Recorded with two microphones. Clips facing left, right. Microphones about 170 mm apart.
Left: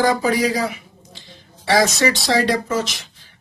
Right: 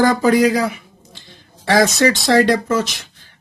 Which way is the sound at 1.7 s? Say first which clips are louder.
Right 3 dB; 55° right (ahead or behind).